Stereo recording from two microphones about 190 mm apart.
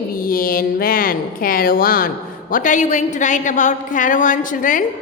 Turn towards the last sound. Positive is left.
turn(degrees=45)  # may be behind; listen again after turning